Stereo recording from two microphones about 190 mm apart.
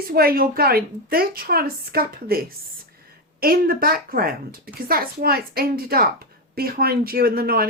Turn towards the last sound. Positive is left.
turn(degrees=-55)  # may be behind; listen again after turning